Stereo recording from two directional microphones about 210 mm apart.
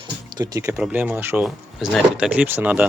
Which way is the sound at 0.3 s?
15° right (ahead or behind).